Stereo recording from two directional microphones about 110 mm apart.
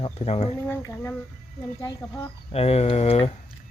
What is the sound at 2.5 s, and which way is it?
Speech, 65° left (ahead or behind).